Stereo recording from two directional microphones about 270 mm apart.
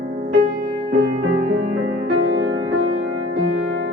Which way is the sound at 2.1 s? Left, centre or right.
Right.